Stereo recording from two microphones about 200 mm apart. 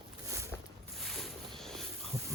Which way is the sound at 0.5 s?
10° left (ahead or behind).